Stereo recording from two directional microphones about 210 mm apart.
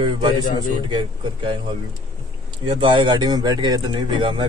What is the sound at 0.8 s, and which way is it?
Speech, 25° right (ahead or behind).